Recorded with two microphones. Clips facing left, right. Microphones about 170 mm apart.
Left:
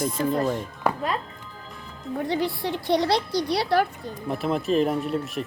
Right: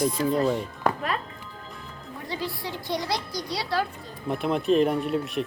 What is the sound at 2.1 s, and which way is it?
Speech, 60° left (ahead or behind).